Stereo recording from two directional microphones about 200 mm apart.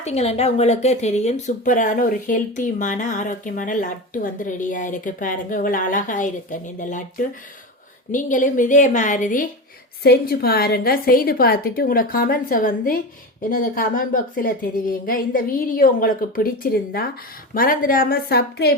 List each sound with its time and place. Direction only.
0.0 s speech: 30° left (ahead or behind)
10.0 s a woman's voice: 50° left (ahead or behind)
17.5 s a woman's voice: 45° left (ahead or behind)